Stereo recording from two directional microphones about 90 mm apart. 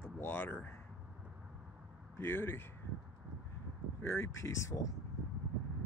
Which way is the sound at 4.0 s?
30° left (ahead or behind).